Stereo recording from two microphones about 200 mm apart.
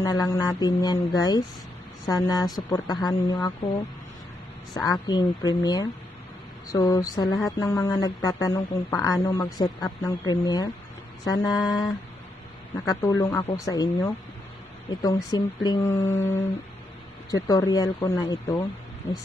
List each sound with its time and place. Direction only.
0.0 s speech: 20° left (ahead or behind)
5.0 s speech: 20° left (ahead or behind)